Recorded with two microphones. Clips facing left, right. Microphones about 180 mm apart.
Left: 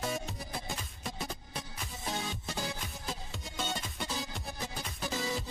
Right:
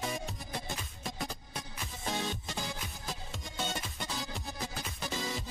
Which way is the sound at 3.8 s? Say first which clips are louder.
Left 1 dB; centre (ahead or behind).